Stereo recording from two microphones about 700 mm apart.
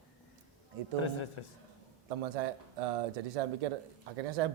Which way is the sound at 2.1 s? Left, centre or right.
Right.